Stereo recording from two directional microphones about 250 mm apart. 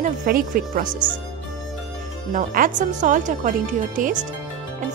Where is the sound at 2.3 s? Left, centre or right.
Right.